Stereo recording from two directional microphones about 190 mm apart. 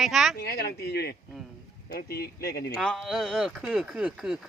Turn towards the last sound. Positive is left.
turn(degrees=-5)  # may be behind; listen again after turning